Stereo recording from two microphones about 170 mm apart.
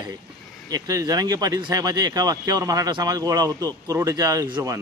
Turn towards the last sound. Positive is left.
turn(degrees=-25)  # may be behind; listen again after turning